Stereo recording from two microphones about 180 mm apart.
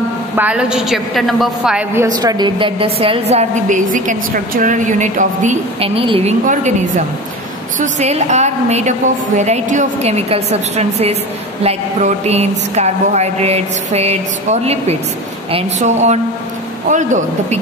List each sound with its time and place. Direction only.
0.4 s a woman's voice: 5° right (ahead or behind)
2.0 s a woman's voice: 20° right (ahead or behind)
6.4 s speech: 45° right (ahead or behind)
7.8 s a woman's voice: 40° right (ahead or behind)